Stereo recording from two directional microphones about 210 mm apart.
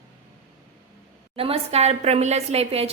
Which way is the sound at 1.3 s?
25° right (ahead or behind).